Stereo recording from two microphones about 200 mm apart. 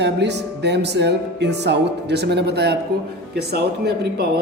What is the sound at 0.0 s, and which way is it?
Speech, 60° right (ahead or behind).